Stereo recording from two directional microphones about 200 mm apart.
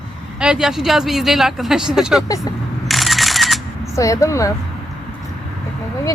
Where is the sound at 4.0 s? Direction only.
15° left (ahead or behind).